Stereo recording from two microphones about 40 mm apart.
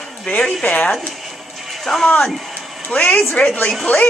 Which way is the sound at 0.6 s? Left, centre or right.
Left.